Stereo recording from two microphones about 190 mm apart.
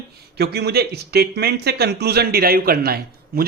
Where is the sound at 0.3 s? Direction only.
55° right (ahead or behind).